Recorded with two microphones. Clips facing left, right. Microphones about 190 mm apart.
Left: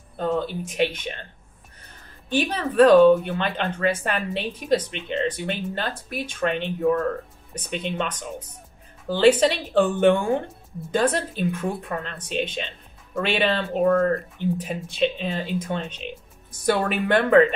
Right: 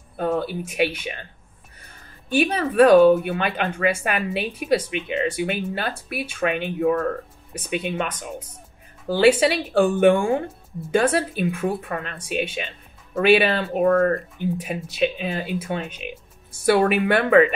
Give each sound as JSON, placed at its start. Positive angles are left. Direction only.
{"t": 0.2, "sound": "speech", "side_deg": -10}
{"t": 2.2, "sound": "speech", "side_deg": -10}